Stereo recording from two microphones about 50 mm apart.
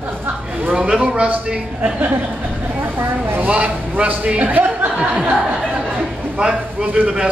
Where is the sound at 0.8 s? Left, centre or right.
Centre.